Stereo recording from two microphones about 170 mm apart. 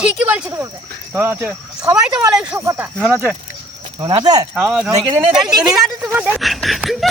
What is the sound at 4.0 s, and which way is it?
Speech, 25° right (ahead or behind).